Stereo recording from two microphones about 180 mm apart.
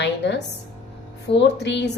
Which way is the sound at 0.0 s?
70° left (ahead or behind).